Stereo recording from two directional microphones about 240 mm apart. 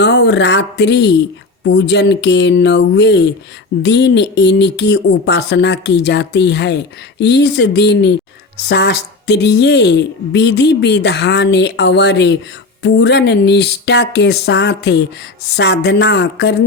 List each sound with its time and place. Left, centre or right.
0.0 s speech: left